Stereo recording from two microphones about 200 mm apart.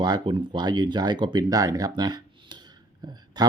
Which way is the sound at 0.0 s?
25° right (ahead or behind).